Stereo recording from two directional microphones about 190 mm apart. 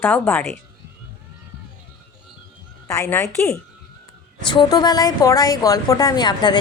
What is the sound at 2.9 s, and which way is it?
A woman's voice, 15° left (ahead or behind).